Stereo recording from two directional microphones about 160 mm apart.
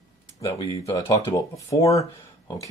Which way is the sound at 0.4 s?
20° left (ahead or behind).